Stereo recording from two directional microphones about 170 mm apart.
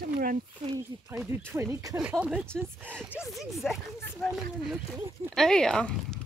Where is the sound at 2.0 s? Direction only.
5° right (ahead or behind).